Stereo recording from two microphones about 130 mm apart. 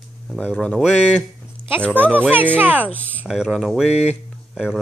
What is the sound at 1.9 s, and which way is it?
Speech, 15° right (ahead or behind).